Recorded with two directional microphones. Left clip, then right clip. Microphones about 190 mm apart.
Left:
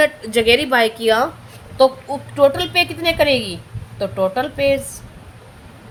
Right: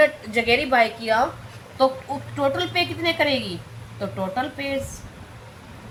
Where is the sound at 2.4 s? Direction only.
60° left (ahead or behind).